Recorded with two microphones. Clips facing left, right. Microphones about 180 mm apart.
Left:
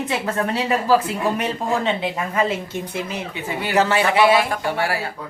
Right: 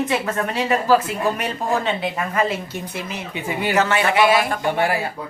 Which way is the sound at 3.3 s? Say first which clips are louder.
Right 6 dB; 15° right (ahead or behind).